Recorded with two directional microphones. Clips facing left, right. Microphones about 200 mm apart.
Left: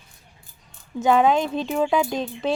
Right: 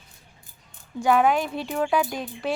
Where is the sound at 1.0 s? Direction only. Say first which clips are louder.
Left 2 dB; 20° left (ahead or behind).